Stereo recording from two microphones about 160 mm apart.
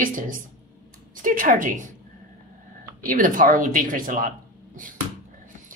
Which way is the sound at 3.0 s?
55° right (ahead or behind).